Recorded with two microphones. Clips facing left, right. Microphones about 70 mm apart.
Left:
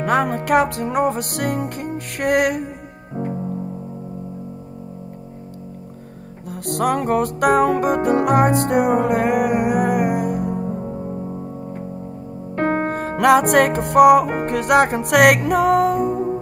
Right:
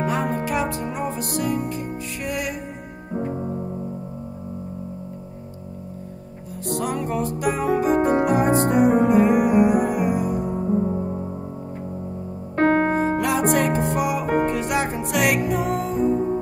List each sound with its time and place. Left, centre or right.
0.0 s music: left
6.6 s music: left
12.5 s music: right
13.2 s music: left
16.1 s music: centre